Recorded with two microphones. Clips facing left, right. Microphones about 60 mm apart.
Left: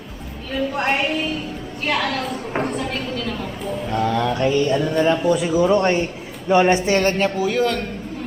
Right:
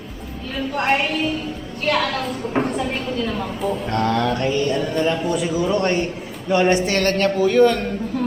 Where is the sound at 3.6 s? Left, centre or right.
Centre.